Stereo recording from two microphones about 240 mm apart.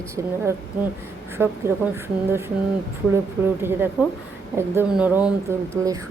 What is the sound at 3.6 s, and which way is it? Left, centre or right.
Speech, centre.